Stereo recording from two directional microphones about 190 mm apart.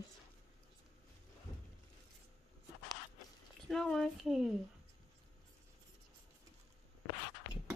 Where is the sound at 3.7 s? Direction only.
Centre (ahead or behind).